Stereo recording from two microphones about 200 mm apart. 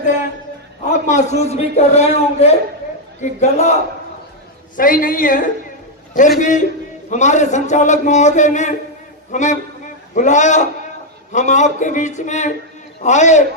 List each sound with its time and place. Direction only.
1.0 s a man's voice: 35° left (ahead or behind)
4.8 s a woman's voice: 45° left (ahead or behind)